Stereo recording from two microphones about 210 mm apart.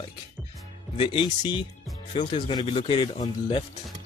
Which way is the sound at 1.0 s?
25° left (ahead or behind).